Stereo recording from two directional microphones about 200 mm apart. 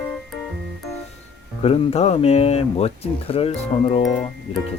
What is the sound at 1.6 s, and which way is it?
Speech, 30° left (ahead or behind).